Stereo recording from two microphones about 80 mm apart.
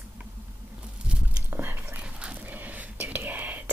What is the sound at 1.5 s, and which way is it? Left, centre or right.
Whispering, right.